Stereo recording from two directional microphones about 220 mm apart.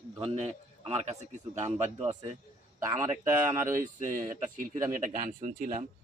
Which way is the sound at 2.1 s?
30° right (ahead or behind).